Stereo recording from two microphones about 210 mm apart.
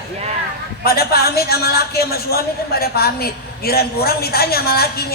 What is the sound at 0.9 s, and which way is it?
A man's voice, 45° left (ahead or behind).